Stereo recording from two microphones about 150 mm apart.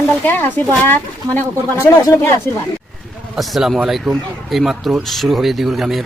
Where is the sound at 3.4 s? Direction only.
Centre (ahead or behind).